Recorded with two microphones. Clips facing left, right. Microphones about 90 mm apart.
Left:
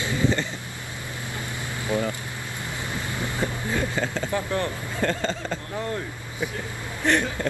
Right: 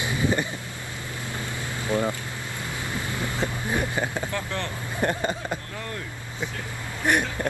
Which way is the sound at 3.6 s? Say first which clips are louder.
Even; 15° right (ahead or behind).